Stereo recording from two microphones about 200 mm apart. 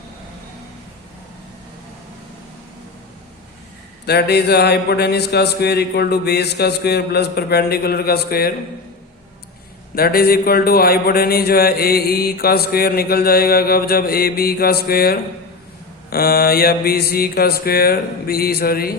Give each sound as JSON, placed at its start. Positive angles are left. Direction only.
{"t": 4.0, "sound": "a man's voice", "side_deg": 55}
{"t": 9.9, "sound": "a man's voice", "side_deg": 50}